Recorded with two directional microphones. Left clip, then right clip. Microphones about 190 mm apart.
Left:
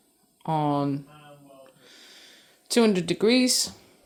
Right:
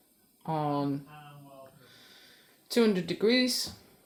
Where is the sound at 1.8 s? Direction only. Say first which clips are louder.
Left 5 dB; 35° left (ahead or behind).